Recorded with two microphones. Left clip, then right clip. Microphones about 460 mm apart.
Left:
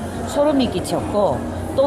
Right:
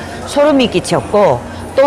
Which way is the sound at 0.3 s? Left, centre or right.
Right.